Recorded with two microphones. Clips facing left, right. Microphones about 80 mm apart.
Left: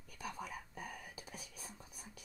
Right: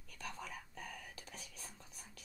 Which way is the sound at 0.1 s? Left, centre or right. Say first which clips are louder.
Left 2 dB; centre.